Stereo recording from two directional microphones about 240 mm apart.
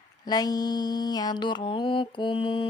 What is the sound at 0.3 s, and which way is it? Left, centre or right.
Mantra, centre.